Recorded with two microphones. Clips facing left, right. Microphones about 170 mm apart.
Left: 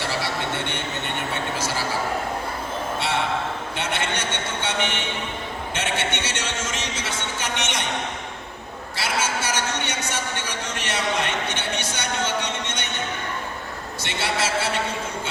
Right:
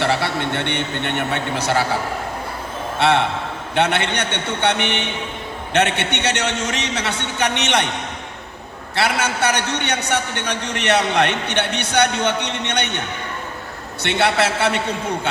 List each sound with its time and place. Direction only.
0.0 s a man's voice: 65° right (ahead or behind)
3.8 s a man's voice: 65° right (ahead or behind)
9.0 s a man's voice: 65° right (ahead or behind)
14.0 s a man's voice: 65° right (ahead or behind)